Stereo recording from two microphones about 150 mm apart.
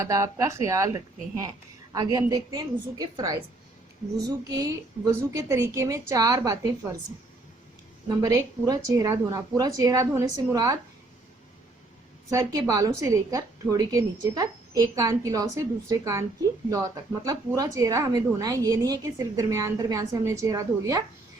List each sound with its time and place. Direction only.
0.0 s a woman's voice: 20° right (ahead or behind)
4.4 s a woman's voice: 25° right (ahead or behind)
8.2 s a woman's voice: 25° right (ahead or behind)
12.3 s a woman's voice: 20° right (ahead or behind)